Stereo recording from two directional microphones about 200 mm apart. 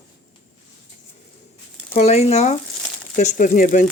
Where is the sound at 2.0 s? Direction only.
35° left (ahead or behind).